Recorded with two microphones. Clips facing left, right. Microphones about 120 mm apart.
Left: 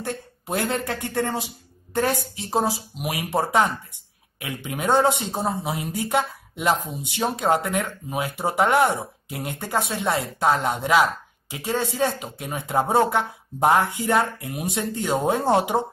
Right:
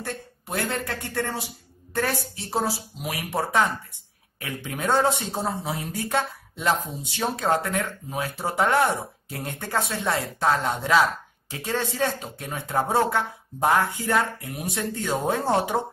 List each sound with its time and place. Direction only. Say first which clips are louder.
0.0 s speech: left 3 dB; 20° left (ahead or behind)